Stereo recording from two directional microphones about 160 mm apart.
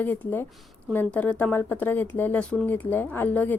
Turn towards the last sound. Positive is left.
turn(degrees=10)  # may be behind; listen again after turning